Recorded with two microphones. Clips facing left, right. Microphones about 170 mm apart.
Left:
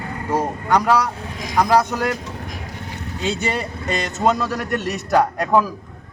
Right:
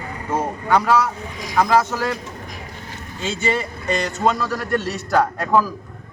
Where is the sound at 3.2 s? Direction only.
15° left (ahead or behind).